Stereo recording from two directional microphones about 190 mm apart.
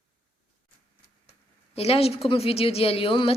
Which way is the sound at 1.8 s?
30° left (ahead or behind).